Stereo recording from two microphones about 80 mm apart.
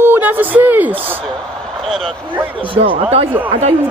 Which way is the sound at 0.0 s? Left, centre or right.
Right.